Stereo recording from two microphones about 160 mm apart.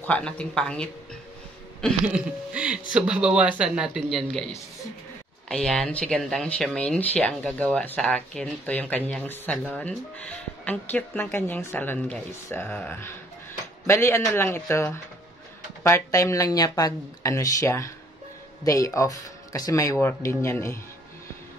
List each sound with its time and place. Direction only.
0.0 s speech: 10° left (ahead or behind)
2.5 s speech: 10° right (ahead or behind)
5.5 s speech: 5° left (ahead or behind)